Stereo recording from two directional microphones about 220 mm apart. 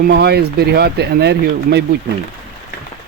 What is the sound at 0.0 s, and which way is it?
Speech, 50° right (ahead or behind).